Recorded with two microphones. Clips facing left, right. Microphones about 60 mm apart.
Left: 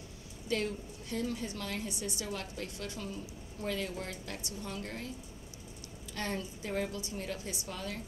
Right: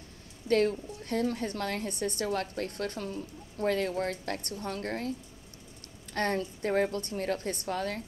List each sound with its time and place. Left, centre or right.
0.5 s a woman's voice: right
6.1 s a woman's voice: right